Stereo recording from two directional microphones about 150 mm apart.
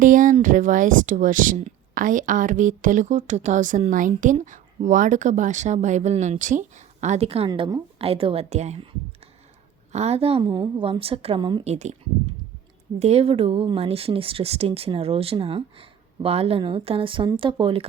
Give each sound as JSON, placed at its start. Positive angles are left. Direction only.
{"t": 0.0, "sound": "a sound", "side_deg": -60}
{"t": 0.4, "sound": "a woman's voice", "side_deg": -60}
{"t": 11.6, "sound": "speech", "side_deg": -50}